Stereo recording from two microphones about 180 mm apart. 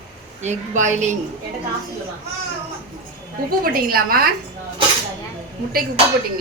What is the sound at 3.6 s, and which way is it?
Speech, 55° right (ahead or behind).